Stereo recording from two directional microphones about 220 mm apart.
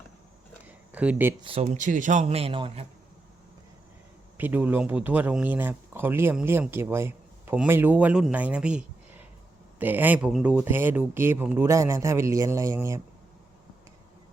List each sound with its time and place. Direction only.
0.9 s speech: 5° right (ahead or behind)
1.4 s speech: 25° right (ahead or behind)
4.4 s speech: 10° right (ahead or behind)